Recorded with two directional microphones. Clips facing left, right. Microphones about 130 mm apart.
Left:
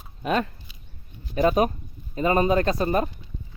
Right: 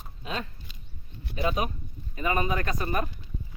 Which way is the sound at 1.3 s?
45° left (ahead or behind).